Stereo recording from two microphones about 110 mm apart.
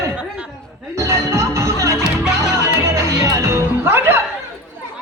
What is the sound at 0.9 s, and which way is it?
Music, 25° right (ahead or behind).